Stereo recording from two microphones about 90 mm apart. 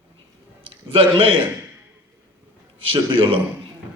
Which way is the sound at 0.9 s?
75° right (ahead or behind).